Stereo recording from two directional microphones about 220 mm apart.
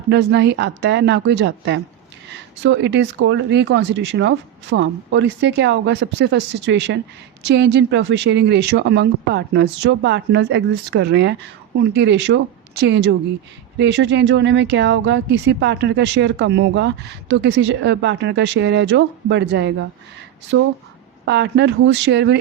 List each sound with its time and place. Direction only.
0.1 s speech: 50° right (ahead or behind)